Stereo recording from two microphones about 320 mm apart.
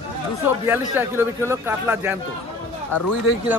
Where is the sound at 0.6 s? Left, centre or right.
Centre.